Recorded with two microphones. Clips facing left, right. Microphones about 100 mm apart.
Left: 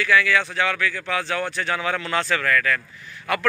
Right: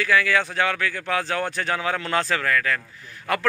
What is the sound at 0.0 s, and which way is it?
Speech, 35° right (ahead or behind).